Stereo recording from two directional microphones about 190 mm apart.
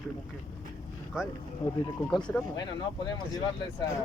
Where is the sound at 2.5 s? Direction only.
20° left (ahead or behind).